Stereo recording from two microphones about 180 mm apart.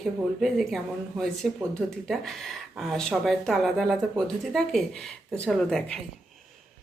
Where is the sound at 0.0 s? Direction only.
Centre (ahead or behind).